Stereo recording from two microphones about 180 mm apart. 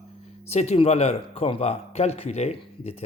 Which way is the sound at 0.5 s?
35° left (ahead or behind).